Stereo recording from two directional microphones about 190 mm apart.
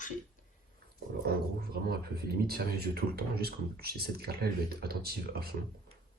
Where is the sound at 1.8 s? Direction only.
55° right (ahead or behind).